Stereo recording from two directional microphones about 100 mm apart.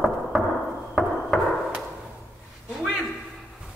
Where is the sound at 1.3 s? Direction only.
Centre (ahead or behind).